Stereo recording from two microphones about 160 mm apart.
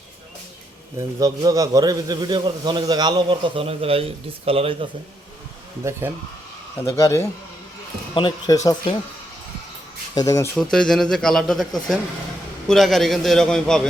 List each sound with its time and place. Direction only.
0.9 s a man's voice: 20° right (ahead or behind)
6.0 s speech: 10° right (ahead or behind)
6.7 s speech: 20° left (ahead or behind)
8.1 s speech: 30° left (ahead or behind)
10.2 s speech: 20° left (ahead or behind)
10.6 s speech: 5° left (ahead or behind)